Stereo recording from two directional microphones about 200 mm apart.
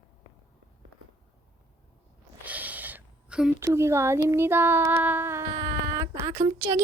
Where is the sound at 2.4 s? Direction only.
10° right (ahead or behind).